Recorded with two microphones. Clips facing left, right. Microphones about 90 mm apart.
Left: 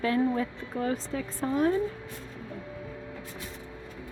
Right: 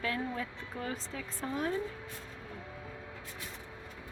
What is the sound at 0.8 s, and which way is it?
Speech, 50° left (ahead or behind).